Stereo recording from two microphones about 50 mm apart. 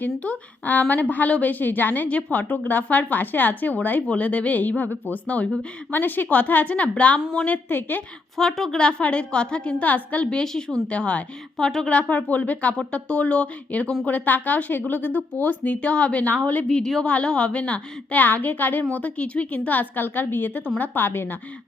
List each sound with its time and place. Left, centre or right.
0.0 s a woman's voice: left
5.2 s a woman's voice: left
5.9 s a woman's voice: left
8.4 s a woman's voice: centre
8.8 s a woman's voice: left
10.2 s a woman's voice: centre
10.8 s a woman's voice: left
11.5 s a woman's voice: centre
11.9 s a woman's voice: left
16.6 s a woman's voice: centre; by 21.3 s left